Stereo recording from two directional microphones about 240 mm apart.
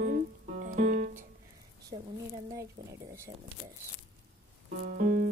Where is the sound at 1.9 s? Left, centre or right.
Right.